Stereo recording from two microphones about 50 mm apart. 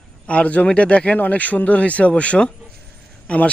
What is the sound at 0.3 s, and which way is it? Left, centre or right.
Speech, left.